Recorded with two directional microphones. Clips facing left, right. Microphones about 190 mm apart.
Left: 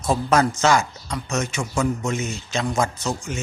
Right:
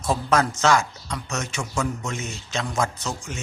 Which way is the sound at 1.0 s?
15° left (ahead or behind).